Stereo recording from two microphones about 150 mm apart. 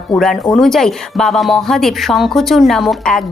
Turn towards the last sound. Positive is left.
turn(degrees=0)  # may be behind; listen again after turning